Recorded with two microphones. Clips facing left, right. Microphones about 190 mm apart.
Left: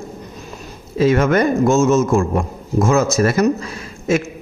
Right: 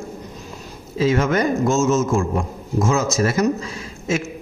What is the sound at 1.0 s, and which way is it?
A man's voice, 60° left (ahead or behind).